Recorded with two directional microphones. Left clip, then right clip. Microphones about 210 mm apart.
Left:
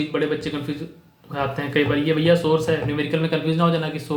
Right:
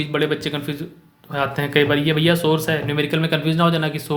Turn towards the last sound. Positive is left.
turn(degrees=-40)  # may be behind; listen again after turning